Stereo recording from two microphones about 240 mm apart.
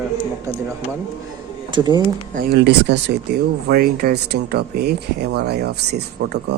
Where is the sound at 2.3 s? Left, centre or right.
Right.